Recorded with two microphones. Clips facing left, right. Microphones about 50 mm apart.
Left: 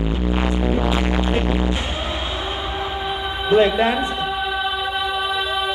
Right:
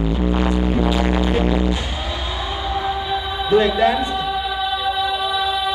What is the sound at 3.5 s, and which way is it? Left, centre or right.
Music, left.